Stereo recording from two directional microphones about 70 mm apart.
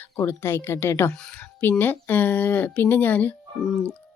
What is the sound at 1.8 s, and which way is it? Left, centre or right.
Speech, left.